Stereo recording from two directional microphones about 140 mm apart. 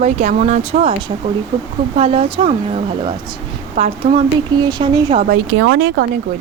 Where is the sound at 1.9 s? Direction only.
45° right (ahead or behind).